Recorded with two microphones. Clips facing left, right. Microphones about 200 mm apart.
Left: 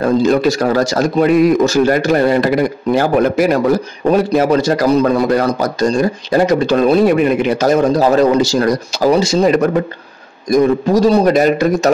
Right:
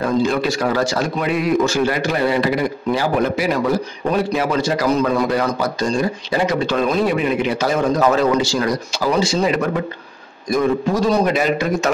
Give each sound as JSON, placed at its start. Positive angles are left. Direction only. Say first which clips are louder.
{"t": 0.0, "sound": "a man's voice", "louder": "left 6 dB", "side_deg": 40}